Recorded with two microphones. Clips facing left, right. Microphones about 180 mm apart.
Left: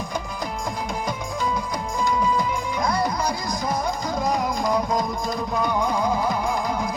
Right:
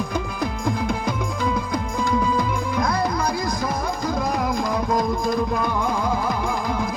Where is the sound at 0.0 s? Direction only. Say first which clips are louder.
Right 4 dB; 55° right (ahead or behind).